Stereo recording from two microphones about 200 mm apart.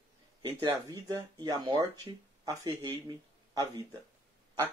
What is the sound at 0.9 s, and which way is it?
Speech, 15° right (ahead or behind).